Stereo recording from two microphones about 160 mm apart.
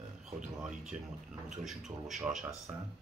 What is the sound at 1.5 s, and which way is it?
Speech, centre (ahead or behind).